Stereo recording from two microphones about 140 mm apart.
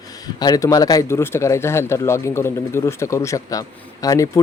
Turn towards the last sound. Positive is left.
turn(degrees=25)  # may be behind; listen again after turning